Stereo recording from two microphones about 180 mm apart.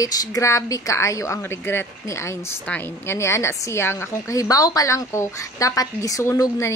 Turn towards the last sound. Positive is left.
turn(degrees=15)  # may be behind; listen again after turning